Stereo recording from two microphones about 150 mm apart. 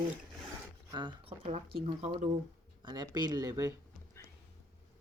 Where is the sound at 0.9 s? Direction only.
30° right (ahead or behind).